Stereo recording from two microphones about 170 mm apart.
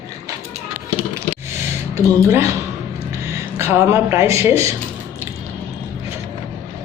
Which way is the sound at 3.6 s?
15° right (ahead or behind).